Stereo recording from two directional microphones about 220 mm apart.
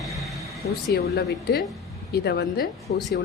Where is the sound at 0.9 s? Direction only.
50° left (ahead or behind).